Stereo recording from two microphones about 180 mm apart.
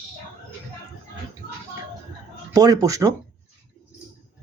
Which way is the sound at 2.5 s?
20° right (ahead or behind).